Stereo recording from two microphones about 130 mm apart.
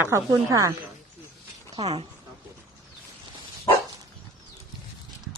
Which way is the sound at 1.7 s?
50° right (ahead or behind).